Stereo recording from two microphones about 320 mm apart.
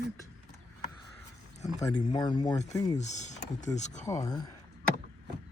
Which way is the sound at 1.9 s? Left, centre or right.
Centre.